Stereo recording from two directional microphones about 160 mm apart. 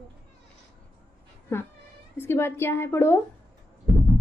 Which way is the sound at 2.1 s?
15° left (ahead or behind).